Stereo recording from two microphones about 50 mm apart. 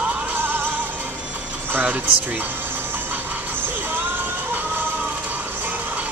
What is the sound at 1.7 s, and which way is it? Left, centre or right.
Speech, right.